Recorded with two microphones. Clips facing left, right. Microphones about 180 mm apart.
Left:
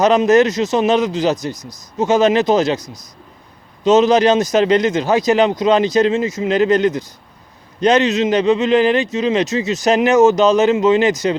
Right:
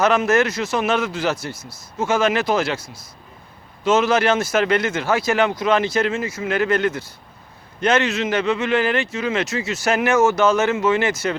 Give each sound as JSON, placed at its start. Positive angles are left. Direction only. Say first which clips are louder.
{"t": 0.0, "sound": "speech", "louder": "left 5 dB", "side_deg": 20}